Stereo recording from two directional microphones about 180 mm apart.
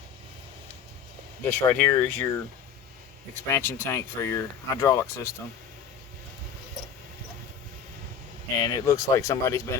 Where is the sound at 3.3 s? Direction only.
10° left (ahead or behind).